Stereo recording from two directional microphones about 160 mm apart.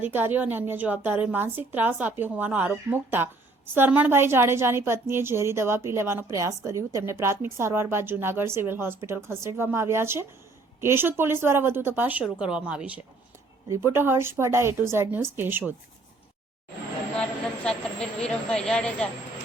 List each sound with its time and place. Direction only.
0.0 s a woman's voice: 15° right (ahead or behind)
17.2 s a woman's voice: 5° left (ahead or behind)